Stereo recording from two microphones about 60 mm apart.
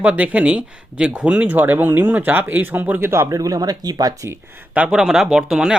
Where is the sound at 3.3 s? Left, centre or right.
Right.